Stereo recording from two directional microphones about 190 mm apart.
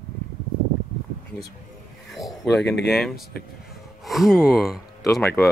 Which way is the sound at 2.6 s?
65° left (ahead or behind).